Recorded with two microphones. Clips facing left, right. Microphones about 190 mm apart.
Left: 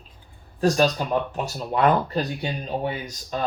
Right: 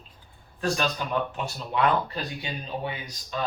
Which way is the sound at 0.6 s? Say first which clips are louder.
Left 7 dB; 40° left (ahead or behind).